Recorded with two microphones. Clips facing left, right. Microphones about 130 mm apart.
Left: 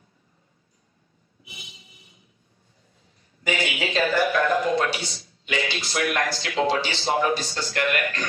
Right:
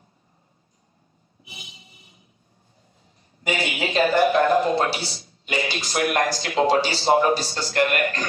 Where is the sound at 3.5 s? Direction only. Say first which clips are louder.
Right 1 dB; 35° right (ahead or behind).